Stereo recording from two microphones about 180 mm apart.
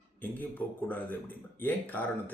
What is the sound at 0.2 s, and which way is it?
Speech, 10° left (ahead or behind).